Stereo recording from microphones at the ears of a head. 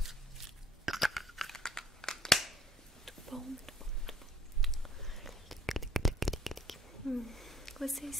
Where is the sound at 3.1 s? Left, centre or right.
Centre.